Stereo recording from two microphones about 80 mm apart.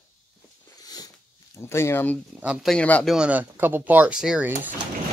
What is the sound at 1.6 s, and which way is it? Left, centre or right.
Speech, left.